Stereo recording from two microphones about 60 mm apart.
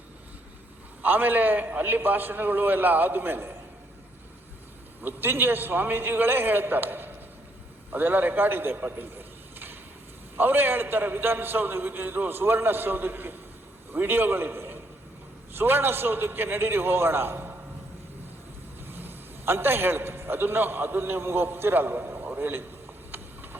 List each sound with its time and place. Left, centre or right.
1.0 s a man's voice: right
5.0 s a man's voice: right
18.9 s a man's voice: right
23.1 s a sound: right